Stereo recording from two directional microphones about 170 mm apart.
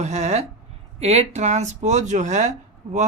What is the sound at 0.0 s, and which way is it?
Speech, 40° right (ahead or behind).